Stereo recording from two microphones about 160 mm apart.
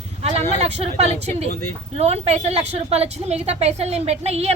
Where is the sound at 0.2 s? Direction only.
40° right (ahead or behind).